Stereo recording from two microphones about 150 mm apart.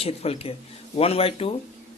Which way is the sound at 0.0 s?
40° left (ahead or behind).